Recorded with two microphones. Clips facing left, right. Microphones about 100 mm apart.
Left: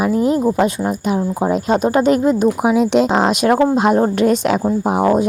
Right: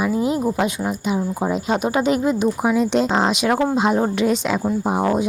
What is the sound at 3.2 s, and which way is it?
Speech, 50° left (ahead or behind).